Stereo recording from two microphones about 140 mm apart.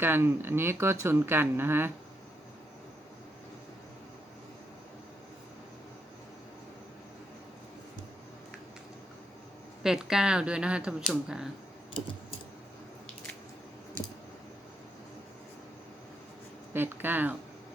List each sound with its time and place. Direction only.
0.0 s speech: 15° right (ahead or behind)
9.8 s speech: 5° right (ahead or behind)
16.7 s speech: 15° right (ahead or behind)